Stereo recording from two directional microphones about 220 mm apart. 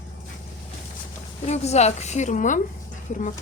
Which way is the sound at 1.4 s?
30° left (ahead or behind).